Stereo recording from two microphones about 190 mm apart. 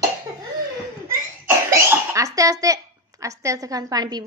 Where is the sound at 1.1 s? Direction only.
15° right (ahead or behind).